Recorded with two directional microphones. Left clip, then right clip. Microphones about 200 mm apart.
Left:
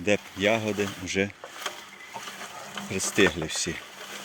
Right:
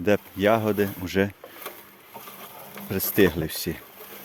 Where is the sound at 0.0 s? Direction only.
30° right (ahead or behind).